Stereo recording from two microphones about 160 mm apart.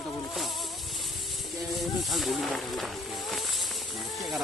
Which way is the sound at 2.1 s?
Centre (ahead or behind).